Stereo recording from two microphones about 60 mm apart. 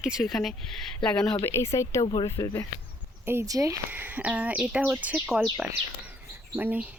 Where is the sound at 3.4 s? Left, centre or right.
Right.